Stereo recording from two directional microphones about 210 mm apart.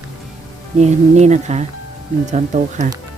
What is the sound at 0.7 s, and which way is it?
A woman's voice, 30° right (ahead or behind).